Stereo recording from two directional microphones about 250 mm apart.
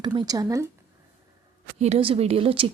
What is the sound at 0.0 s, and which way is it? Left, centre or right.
Speech, centre.